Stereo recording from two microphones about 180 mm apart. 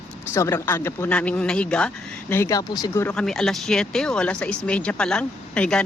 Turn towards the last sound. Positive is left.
turn(degrees=5)  # may be behind; listen again after turning